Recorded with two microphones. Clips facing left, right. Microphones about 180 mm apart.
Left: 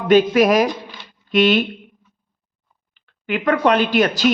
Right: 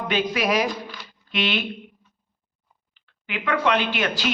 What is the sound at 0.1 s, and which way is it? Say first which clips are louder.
A man's voice: left 11 dB; 45° left (ahead or behind).